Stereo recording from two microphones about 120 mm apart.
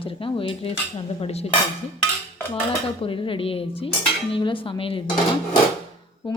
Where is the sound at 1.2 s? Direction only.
60° left (ahead or behind).